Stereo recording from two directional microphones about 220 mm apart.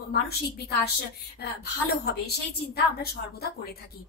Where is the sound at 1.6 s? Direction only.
45° left (ahead or behind).